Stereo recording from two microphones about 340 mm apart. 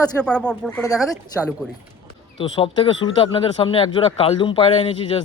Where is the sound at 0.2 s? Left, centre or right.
Centre.